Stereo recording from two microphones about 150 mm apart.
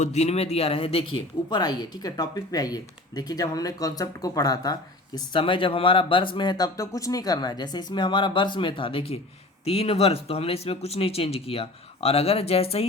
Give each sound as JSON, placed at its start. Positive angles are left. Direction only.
{"t": 0.0, "sound": "speech", "side_deg": 50}